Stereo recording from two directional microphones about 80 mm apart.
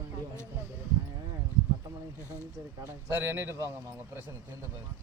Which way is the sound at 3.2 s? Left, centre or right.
Right.